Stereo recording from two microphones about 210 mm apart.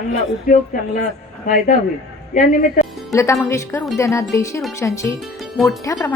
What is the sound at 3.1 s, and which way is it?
Speech, 15° left (ahead or behind).